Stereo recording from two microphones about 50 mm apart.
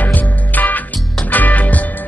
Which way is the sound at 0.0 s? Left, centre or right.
Left.